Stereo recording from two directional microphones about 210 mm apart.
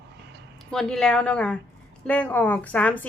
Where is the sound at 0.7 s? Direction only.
5° left (ahead or behind).